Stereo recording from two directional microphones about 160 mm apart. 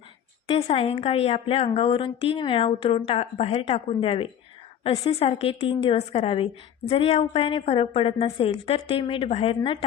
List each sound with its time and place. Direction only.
0.4 s a woman's voice: 35° left (ahead or behind)